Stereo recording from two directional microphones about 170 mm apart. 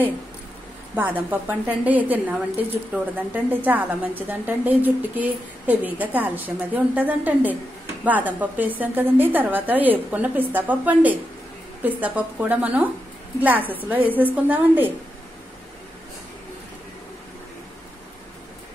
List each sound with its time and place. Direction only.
0.9 s a woman's voice: 10° right (ahead or behind)